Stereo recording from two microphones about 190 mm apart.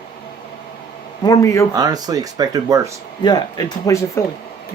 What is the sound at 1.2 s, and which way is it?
Speech, 20° left (ahead or behind).